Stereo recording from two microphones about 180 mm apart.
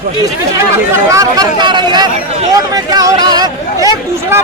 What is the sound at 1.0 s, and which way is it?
Speech, 20° right (ahead or behind).